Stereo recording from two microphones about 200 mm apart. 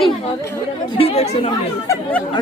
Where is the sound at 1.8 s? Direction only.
10° left (ahead or behind).